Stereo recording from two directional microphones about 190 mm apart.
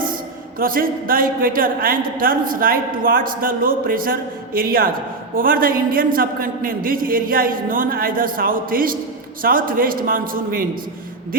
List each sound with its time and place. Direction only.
0.6 s a man's voice: 50° right (ahead or behind)